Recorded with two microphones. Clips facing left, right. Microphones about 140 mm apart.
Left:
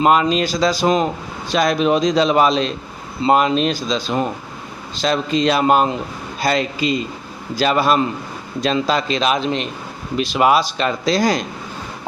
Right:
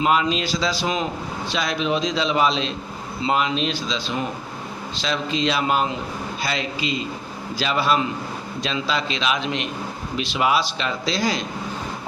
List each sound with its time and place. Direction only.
0.0 s speech: 50° left (ahead or behind)